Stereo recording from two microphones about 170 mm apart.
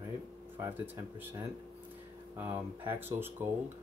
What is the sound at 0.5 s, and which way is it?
Speech, 10° right (ahead or behind).